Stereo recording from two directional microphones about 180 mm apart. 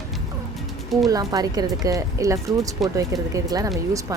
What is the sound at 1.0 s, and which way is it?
Speech, 20° right (ahead or behind).